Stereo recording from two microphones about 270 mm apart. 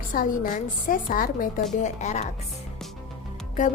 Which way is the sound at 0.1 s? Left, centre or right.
Left.